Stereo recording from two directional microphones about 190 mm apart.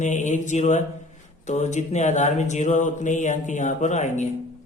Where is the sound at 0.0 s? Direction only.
40° left (ahead or behind).